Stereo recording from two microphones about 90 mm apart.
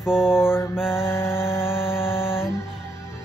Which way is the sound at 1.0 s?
25° left (ahead or behind).